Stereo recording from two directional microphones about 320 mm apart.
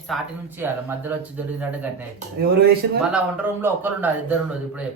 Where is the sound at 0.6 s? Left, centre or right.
Centre.